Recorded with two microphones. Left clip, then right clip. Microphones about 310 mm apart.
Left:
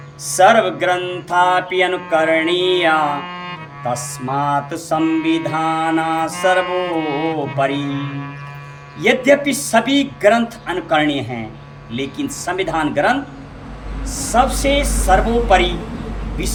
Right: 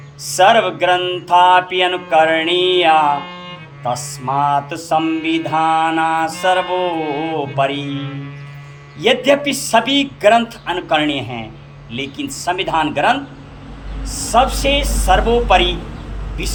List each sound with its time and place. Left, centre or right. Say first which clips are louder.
0.3 s speech: even; centre
3.2 s cello: left 1 dB; centre
3.9 s speech: right 3 dB; centre
5.0 s music: left 1 dB; centre
5.5 s speech: right 3 dB; centre
6.7 s music: right 1 dB; centre
7.5 s speech: right 2 dB; centre
7.9 s music: left 1 dB; centre
9.0 s speech: even; centre